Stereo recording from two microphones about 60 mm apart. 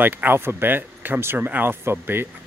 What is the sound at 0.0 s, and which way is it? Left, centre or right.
Speech, right.